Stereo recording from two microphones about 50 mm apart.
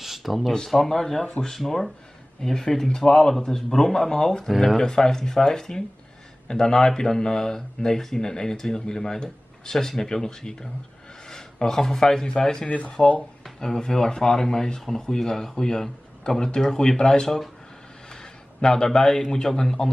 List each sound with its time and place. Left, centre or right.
0.0 s a sound: centre
0.7 s speech: centre
1.5 s speech: centre
4.5 s speech: centre
4.7 s speech: centre
12.6 s speech: left
13.6 s speech: centre
18.6 s a man's voice: centre